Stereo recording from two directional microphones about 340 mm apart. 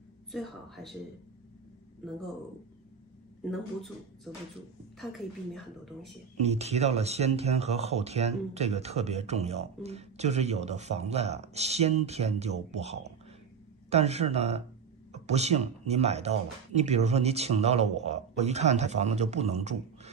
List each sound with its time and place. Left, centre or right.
0.3 s a woman's voice: centre
4.9 s a woman's voice: centre
6.4 s speech: centre